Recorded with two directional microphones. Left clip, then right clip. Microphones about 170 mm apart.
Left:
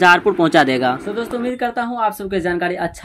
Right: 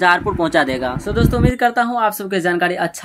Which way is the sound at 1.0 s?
30° right (ahead or behind).